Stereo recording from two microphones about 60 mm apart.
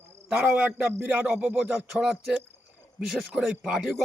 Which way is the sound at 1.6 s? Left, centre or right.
Centre.